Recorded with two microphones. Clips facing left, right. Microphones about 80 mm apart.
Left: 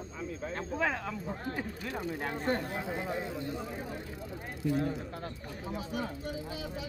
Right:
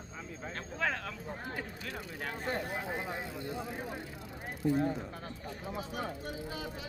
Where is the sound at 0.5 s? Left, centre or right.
Centre.